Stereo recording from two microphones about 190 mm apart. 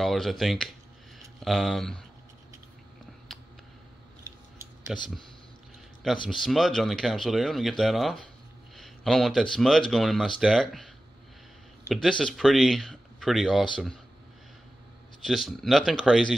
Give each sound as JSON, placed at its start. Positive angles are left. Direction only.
{"t": 0.0, "sound": "speech", "side_deg": 0}
{"t": 4.9, "sound": "speech", "side_deg": 0}
{"t": 6.2, "sound": "speech", "side_deg": 0}
{"t": 11.9, "sound": "speech", "side_deg": 0}
{"t": 15.2, "sound": "speech", "side_deg": 0}